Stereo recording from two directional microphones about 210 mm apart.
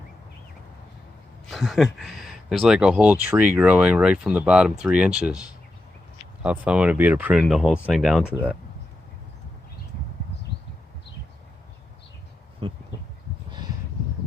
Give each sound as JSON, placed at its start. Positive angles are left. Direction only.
{"t": 1.5, "sound": "speech", "side_deg": 0}
{"t": 12.6, "sound": "speech", "side_deg": -25}